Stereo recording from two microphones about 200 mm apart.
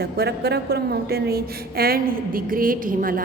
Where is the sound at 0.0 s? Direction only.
55° right (ahead or behind).